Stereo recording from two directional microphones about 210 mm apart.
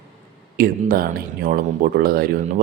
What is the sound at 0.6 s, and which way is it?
Speech, 45° right (ahead or behind).